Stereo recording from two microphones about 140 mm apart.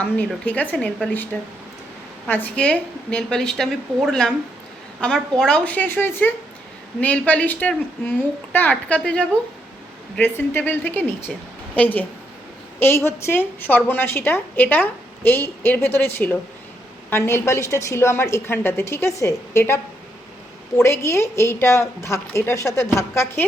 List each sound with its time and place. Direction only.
0.4 s a woman's voice: 10° left (ahead or behind)
13.1 s a woman's voice: 15° left (ahead or behind)
20.8 s a woman's voice: 20° left (ahead or behind)